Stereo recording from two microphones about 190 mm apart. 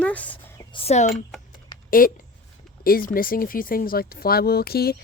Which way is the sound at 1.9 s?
50° left (ahead or behind).